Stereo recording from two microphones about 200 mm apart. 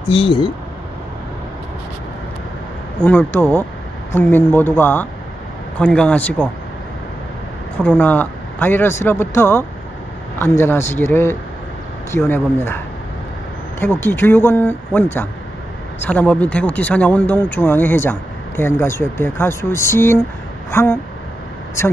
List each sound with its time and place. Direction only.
0.1 s speech: 25° left (ahead or behind)
3.0 s a man's voice: 10° left (ahead or behind)
7.7 s speech: 10° left (ahead or behind)